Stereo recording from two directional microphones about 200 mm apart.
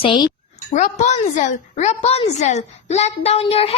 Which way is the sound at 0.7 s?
40° left (ahead or behind).